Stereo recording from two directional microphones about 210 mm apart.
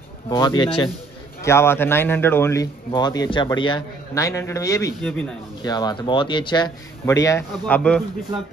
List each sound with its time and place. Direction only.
0.3 s speech: 20° left (ahead or behind)
5.6 s speech: 20° left (ahead or behind)